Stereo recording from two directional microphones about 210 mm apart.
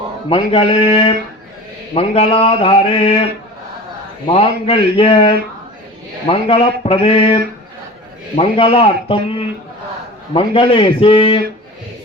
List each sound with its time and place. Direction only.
0.3 s mantra: 25° left (ahead or behind)
4.3 s mantra: 25° left (ahead or behind)
8.4 s mantra: 25° left (ahead or behind)
10.3 s mantra: 25° left (ahead or behind)